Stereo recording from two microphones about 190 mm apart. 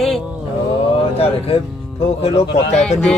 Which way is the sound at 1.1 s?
30° left (ahead or behind).